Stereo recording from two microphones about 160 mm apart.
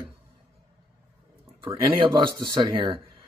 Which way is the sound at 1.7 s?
25° right (ahead or behind).